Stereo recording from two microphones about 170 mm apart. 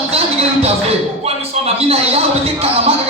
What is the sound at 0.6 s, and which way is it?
Speech, 35° right (ahead or behind).